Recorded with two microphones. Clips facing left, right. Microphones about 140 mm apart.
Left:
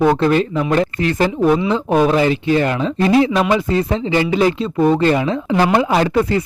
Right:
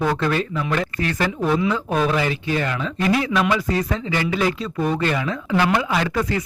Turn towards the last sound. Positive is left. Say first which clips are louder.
# left 7 dB
turn(degrees=30)  # may be behind; listen again after turning